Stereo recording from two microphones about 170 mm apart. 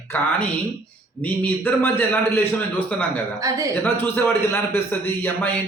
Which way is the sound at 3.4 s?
20° right (ahead or behind).